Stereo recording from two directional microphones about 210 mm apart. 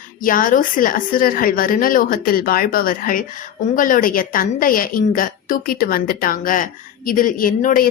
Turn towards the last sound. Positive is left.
turn(degrees=40)  # may be behind; listen again after turning